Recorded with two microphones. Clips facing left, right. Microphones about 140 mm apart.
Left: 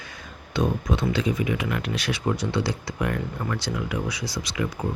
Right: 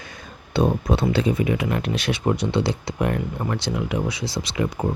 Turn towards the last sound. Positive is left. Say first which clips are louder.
# right 4 dB
turn(degrees=-30)  # may be behind; listen again after turning